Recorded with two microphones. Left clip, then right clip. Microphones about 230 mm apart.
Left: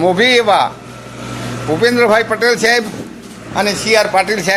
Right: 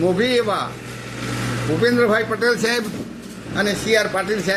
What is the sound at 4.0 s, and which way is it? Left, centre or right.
Speech, centre.